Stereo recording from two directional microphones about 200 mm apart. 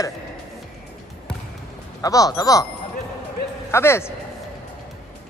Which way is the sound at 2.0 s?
15° left (ahead or behind).